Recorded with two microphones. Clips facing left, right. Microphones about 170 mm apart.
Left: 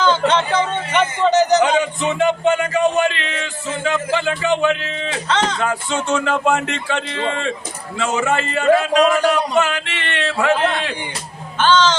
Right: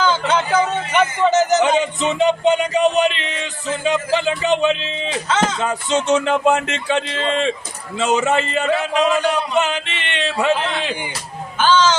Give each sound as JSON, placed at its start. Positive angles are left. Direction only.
{"t": 0.0, "sound": "a sound", "side_deg": -5}
{"t": 1.3, "sound": "speech", "side_deg": -5}
{"t": 1.6, "sound": "speech", "side_deg": -20}
{"t": 5.3, "sound": "a sound", "side_deg": -5}
{"t": 5.5, "sound": "speech", "side_deg": -20}
{"t": 11.6, "sound": "speech", "side_deg": -10}